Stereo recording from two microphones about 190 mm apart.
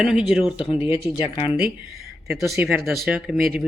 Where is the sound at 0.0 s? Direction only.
5° right (ahead or behind).